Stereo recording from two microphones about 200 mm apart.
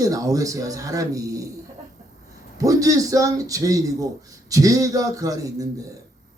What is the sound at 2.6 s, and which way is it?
A man's voice, 15° right (ahead or behind).